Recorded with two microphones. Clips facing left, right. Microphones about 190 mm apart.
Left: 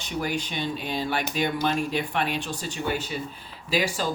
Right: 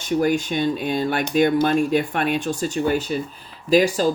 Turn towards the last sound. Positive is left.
turn(degrees=-45)  # may be behind; listen again after turning